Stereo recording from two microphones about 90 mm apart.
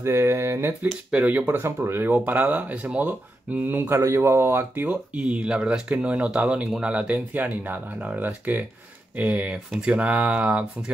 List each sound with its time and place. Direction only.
0.0 s speech: 25° right (ahead or behind)
1.1 s speech: 15° right (ahead or behind)
1.6 s speech: 25° right (ahead or behind)